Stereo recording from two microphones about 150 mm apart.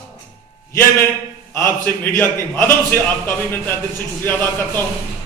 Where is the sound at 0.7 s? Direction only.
15° left (ahead or behind).